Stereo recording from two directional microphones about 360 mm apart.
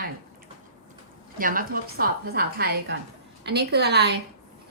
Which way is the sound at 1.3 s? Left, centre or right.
Right.